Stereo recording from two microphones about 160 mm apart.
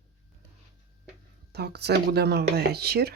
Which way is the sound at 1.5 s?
90° right.